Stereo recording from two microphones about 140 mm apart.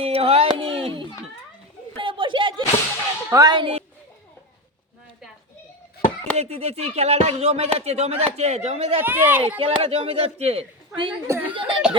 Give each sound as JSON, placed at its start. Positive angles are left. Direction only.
{"t": 0.0, "sound": "a sound", "side_deg": -45}
{"t": 3.2, "sound": "speech", "side_deg": -25}
{"t": 6.3, "sound": "speech", "side_deg": -45}
{"t": 9.0, "sound": "a child's voice", "side_deg": -15}
{"t": 9.6, "sound": "speech", "side_deg": -45}
{"t": 11.3, "sound": "a child's voice", "side_deg": -15}